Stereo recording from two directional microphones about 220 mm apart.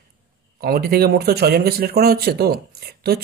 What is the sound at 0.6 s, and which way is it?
Speech, 45° right (ahead or behind).